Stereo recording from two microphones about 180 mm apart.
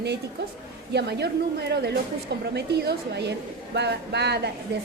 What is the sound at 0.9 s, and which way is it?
Speech, 65° right (ahead or behind).